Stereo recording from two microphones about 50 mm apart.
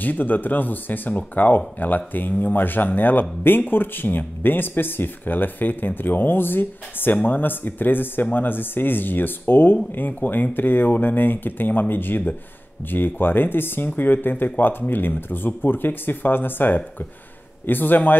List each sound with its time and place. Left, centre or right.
0.0 s speech: left